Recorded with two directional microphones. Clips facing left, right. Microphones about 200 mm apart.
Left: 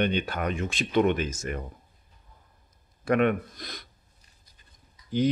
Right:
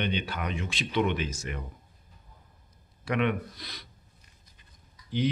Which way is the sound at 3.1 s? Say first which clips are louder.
Left 5 dB; 45° left (ahead or behind).